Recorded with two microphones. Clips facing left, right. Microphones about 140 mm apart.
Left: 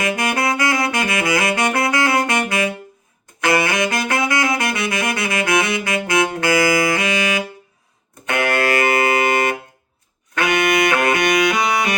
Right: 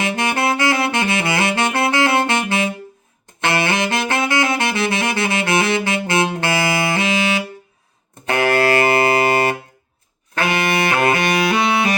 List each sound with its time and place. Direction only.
0.0 s saxophone: 25° right (ahead or behind)
8.3 s music: 30° right (ahead or behind)